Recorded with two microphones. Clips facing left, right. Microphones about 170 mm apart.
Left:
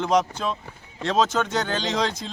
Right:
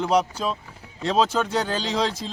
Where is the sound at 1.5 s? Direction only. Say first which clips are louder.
Right 1 dB; 30° right (ahead or behind).